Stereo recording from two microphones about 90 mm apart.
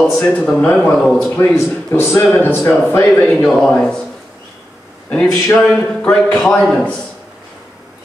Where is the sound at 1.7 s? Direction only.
25° left (ahead or behind).